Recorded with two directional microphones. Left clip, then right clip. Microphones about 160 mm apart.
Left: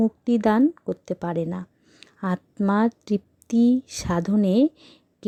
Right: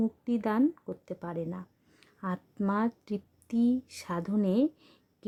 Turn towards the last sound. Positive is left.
turn(degrees=40)  # may be behind; listen again after turning